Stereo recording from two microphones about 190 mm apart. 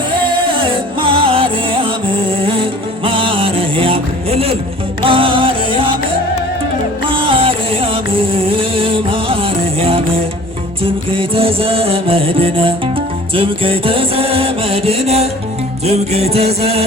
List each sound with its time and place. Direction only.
0.2 s music: 30° right (ahead or behind)
7.1 s music: 30° right (ahead or behind)
13.3 s mantra: 30° right (ahead or behind)
15.9 s music: 35° right (ahead or behind)